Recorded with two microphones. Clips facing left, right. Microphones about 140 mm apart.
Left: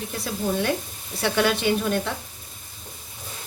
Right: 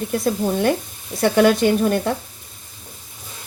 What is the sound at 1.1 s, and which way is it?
Speech, 45° right (ahead or behind).